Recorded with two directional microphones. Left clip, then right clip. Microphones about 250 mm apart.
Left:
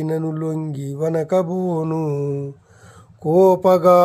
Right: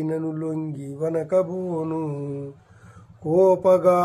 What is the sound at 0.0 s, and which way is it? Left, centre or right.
Mantra, left.